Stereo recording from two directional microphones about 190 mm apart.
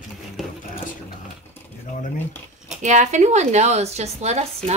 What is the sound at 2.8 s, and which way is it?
A woman's voice, 40° right (ahead or behind).